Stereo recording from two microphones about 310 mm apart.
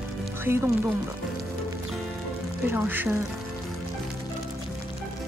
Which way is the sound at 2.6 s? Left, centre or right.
Centre.